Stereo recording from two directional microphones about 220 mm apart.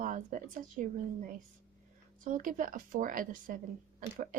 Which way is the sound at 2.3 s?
35° right (ahead or behind).